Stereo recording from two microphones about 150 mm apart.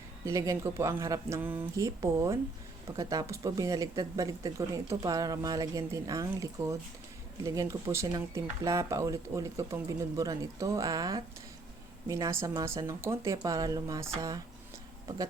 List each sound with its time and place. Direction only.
0.3 s speech: 20° right (ahead or behind)